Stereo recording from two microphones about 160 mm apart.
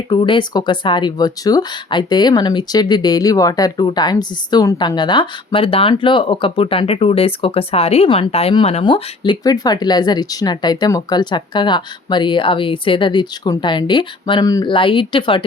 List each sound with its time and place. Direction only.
0.1 s speech: 30° left (ahead or behind)